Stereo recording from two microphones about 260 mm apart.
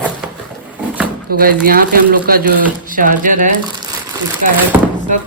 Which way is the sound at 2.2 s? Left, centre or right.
Right.